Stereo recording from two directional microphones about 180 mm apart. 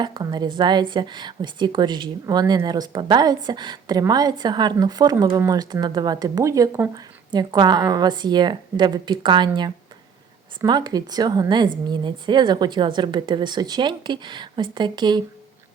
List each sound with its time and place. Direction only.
0.0 s a woman's voice: 25° right (ahead or behind)